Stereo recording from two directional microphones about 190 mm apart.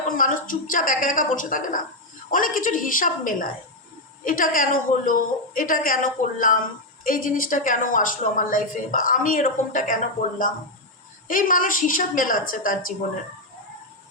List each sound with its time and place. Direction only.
0.2 s a woman's voice: 45° left (ahead or behind)